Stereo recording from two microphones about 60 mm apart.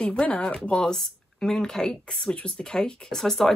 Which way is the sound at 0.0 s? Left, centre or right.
Centre.